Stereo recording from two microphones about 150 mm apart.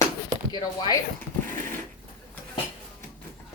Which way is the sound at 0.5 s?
25° left (ahead or behind).